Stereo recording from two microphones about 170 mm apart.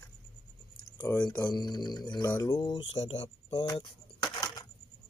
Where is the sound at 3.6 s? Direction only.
20° left (ahead or behind).